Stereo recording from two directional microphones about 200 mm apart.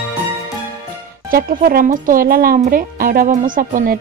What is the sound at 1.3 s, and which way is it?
Speech, 45° right (ahead or behind).